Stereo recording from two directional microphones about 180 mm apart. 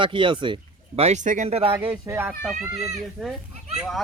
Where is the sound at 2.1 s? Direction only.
10° right (ahead or behind).